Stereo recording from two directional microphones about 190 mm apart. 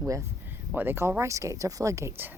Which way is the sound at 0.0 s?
15° right (ahead or behind).